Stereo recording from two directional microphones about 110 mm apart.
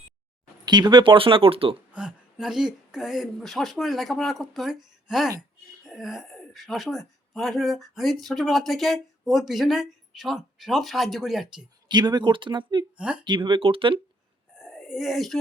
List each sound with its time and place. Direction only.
0.6 s speech: 40° right (ahead or behind); by 1.7 s 55° right (ahead or behind)
1.9 s speech: 5° right (ahead or behind)
11.9 s speech: 40° right (ahead or behind)
13.0 s speech: 10° right (ahead or behind)
13.2 s speech: 45° right (ahead or behind)
14.5 s wheeze: 5° right (ahead or behind)